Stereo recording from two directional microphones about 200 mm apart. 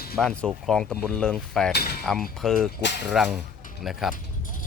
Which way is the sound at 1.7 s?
50° left (ahead or behind).